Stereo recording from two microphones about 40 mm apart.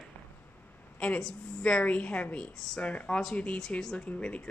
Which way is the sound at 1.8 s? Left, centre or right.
Left.